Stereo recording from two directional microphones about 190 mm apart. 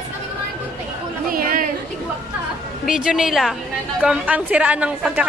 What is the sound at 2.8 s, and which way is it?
A woman's voice, 5° right (ahead or behind).